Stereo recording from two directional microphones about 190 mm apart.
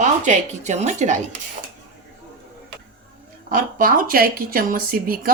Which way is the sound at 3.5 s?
45° right (ahead or behind).